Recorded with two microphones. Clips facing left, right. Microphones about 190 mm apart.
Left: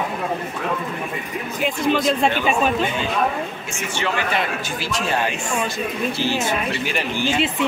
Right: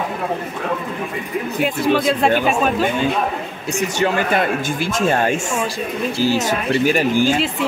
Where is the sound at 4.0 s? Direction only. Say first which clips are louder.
Right 5 dB; 45° right (ahead or behind).